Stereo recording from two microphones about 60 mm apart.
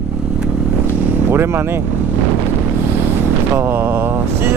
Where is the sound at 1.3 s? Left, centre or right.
Right.